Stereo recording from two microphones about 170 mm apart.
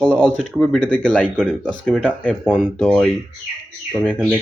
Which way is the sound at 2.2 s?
10° left (ahead or behind).